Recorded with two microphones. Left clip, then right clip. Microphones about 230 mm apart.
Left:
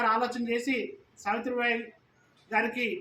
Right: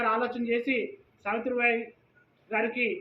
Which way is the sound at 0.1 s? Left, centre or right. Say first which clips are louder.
Even; left.